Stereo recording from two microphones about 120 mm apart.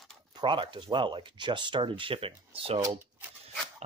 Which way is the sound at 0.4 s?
45° right (ahead or behind).